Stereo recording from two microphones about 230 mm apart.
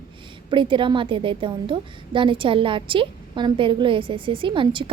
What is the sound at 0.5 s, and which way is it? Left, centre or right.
A woman's voice, right.